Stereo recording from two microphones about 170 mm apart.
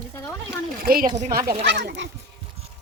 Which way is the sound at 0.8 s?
60° right (ahead or behind).